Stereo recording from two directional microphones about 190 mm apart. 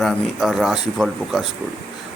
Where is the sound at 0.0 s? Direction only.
Centre (ahead or behind).